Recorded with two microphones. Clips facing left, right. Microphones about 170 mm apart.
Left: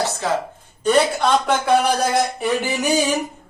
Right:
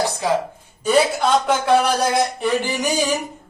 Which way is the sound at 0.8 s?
5° right (ahead or behind).